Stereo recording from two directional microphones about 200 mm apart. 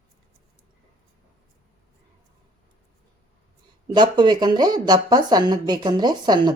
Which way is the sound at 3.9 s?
20° right (ahead or behind).